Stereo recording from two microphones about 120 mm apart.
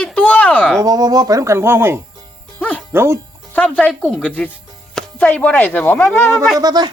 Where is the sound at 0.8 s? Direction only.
30° right (ahead or behind).